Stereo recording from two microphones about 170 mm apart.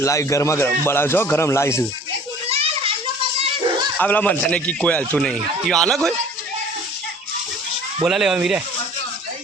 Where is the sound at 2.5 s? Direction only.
35° right (ahead or behind).